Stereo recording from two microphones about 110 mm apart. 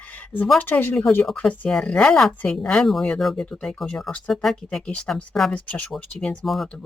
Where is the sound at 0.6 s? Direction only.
20° left (ahead or behind).